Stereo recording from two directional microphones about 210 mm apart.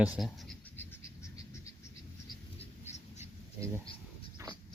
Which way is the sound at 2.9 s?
35° left (ahead or behind).